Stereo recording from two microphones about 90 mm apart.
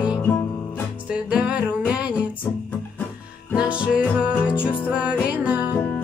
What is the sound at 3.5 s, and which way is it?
Music, 10° right (ahead or behind).